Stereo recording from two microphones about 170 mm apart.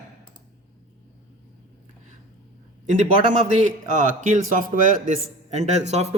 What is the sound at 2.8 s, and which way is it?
A man's voice, 45° right (ahead or behind).